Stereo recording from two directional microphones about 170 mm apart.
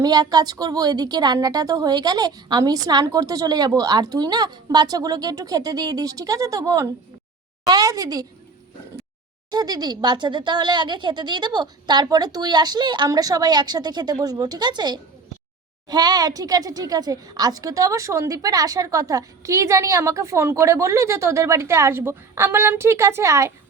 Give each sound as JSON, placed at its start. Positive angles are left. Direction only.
{"t": 0.0, "sound": "a woman's voice", "side_deg": -20}
{"t": 9.5, "sound": "speech", "side_deg": -25}